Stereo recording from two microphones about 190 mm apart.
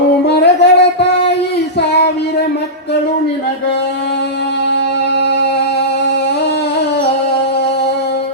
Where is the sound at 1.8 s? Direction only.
60° left (ahead or behind).